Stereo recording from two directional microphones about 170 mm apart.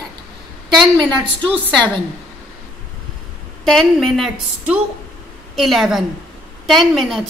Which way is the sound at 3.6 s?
Centre (ahead or behind).